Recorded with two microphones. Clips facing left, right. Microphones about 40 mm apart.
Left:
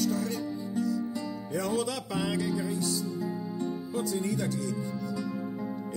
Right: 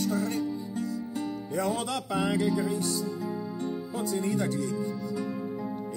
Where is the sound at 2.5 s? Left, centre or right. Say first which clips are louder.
Right 3 dB; right.